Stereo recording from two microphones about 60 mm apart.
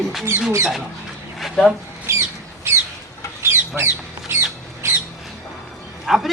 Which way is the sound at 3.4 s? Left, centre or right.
Right.